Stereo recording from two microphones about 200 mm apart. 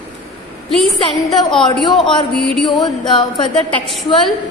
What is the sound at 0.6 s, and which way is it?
A woman's voice, centre (ahead or behind).